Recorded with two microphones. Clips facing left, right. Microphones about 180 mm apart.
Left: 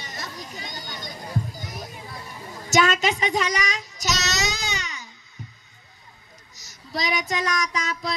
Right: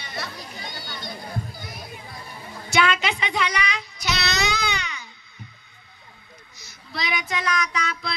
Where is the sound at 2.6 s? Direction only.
40° left (ahead or behind).